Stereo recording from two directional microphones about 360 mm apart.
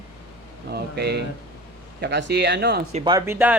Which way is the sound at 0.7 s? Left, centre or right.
Right.